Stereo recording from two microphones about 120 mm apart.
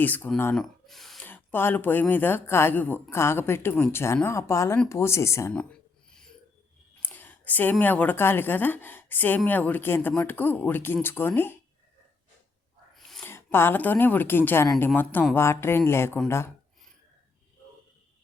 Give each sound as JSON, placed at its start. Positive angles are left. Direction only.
{"t": 0.0, "sound": "speech", "side_deg": 15}
{"t": 0.5, "sound": "speech", "side_deg": 0}
{"t": 1.2, "sound": "speech", "side_deg": 15}
{"t": 5.5, "sound": "a sound", "side_deg": 10}
{"t": 7.0, "sound": "a woman's voice", "side_deg": 15}
{"t": 12.9, "sound": "a sound", "side_deg": 5}
{"t": 13.2, "sound": "speech", "side_deg": 20}